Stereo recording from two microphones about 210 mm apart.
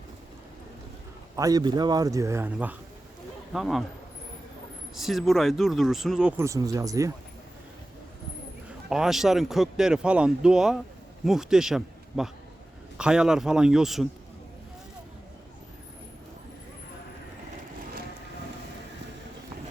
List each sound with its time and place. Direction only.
1.4 s speech: 15° right (ahead or behind); by 3.8 s centre (ahead or behind)
4.9 s speech: centre (ahead or behind)
8.9 s speech: centre (ahead or behind)